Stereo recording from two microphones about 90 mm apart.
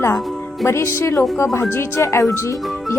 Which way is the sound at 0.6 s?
30° left (ahead or behind).